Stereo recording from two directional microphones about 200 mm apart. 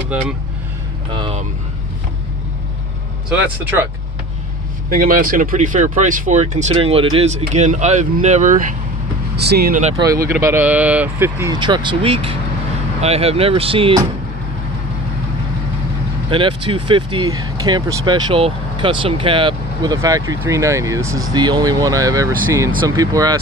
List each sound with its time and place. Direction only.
0.1 s speech: 5° right (ahead or behind)
1.1 s speech: 25° right (ahead or behind)
3.3 s speech: 10° right (ahead or behind)
4.8 s speech: 45° right (ahead or behind)
9.4 s speech: 50° right (ahead or behind)
9.9 s speech: 15° right (ahead or behind)
11.6 s speech: 25° right (ahead or behind)
16.3 s speech: 25° right (ahead or behind)